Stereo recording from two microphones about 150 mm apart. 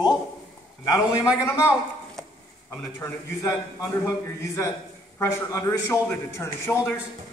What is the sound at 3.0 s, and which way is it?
A man's voice, 20° left (ahead or behind).